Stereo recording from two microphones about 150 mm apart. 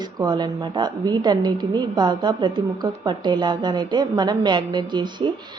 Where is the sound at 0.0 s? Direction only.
30° right (ahead or behind).